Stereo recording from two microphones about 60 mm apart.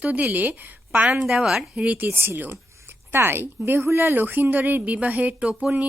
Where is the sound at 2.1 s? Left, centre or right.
Right.